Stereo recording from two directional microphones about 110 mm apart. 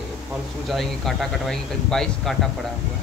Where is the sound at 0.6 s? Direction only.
Centre (ahead or behind).